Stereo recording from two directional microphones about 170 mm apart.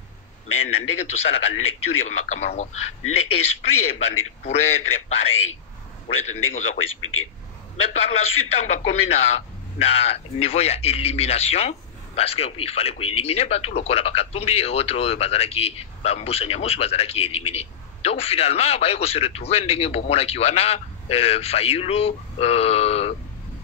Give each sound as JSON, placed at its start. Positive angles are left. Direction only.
{"t": 0.6, "sound": "a man's voice", "side_deg": 35}
{"t": 6.0, "sound": "a man's voice", "side_deg": 40}
{"t": 7.9, "sound": "a man's voice", "side_deg": 35}